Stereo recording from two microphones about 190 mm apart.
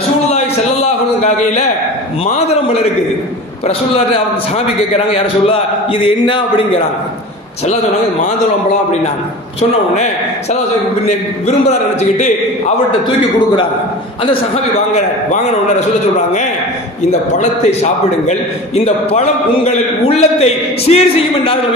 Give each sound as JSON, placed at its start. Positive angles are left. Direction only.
{"t": 0.3, "sound": "a sound", "side_deg": 35}
{"t": 2.3, "sound": "a man's voice", "side_deg": 35}
{"t": 7.6, "sound": "a man's voice", "side_deg": 35}
{"t": 12.0, "sound": "a man's voice", "side_deg": 35}
{"t": 14.2, "sound": "a man's voice", "side_deg": 35}
{"t": 17.4, "sound": "a man's voice", "side_deg": 35}